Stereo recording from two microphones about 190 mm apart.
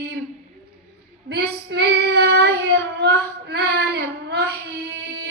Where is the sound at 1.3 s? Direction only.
60° right (ahead or behind).